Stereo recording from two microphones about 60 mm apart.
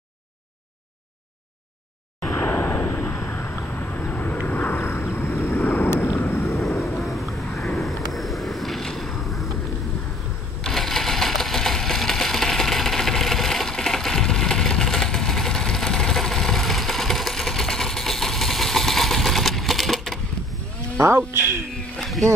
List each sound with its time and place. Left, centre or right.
2.3 s a sound: left
3.2 s vehicle: left
7.0 s vehicle: centre
10.6 s sewing machine: centre
21.0 s a sound: right
21.9 s wild animals: centre